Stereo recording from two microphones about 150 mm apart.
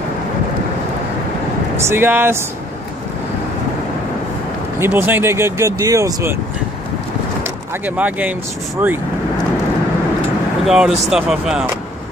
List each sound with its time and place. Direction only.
1.8 s speech: 15° right (ahead or behind)
4.7 s speech: 15° right (ahead or behind)
7.8 s speech: 10° right (ahead or behind)
10.6 s speech: 5° right (ahead or behind)